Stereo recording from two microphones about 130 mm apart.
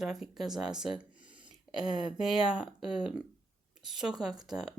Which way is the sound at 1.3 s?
40° right (ahead or behind).